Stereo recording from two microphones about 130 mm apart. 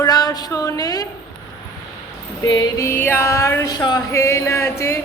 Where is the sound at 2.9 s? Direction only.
15° left (ahead or behind).